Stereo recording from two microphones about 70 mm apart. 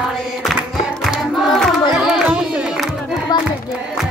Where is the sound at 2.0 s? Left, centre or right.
Centre.